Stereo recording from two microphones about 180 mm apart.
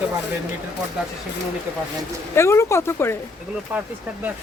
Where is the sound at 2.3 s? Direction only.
15° left (ahead or behind).